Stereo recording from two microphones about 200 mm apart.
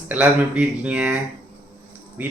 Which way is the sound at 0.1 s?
5° right (ahead or behind).